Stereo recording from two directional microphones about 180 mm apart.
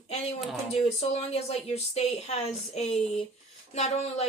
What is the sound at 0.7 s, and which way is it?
Speech, 35° left (ahead or behind).